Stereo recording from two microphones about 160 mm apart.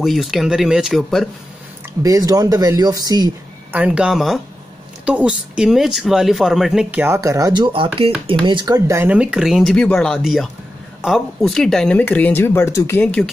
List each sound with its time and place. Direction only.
0.0 s speech: centre (ahead or behind)
2.0 s speech: 20° right (ahead or behind)
3.7 s speech: 10° right (ahead or behind); by 13.2 s 10° left (ahead or behind)